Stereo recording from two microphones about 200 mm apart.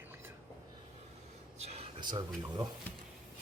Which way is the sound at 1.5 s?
30° right (ahead or behind).